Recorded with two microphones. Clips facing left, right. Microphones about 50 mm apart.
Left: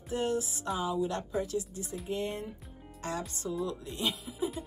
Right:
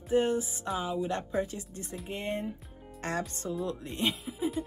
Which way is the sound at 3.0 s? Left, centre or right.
Right.